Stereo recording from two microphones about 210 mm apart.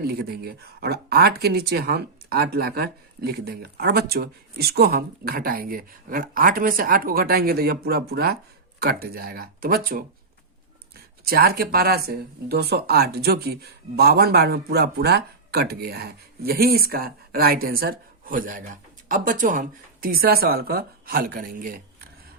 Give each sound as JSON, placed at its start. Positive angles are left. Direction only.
{"t": 0.0, "sound": "speech", "side_deg": -45}
{"t": 11.3, "sound": "speech", "side_deg": -45}